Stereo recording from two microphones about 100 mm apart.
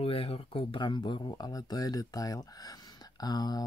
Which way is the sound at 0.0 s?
75° left (ahead or behind).